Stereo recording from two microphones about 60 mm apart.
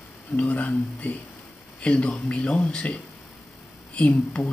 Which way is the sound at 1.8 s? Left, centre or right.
Centre.